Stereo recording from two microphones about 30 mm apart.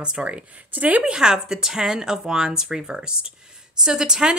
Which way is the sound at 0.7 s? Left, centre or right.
Right.